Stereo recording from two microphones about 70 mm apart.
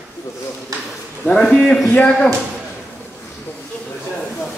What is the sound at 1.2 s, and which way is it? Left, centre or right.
A man's voice, centre.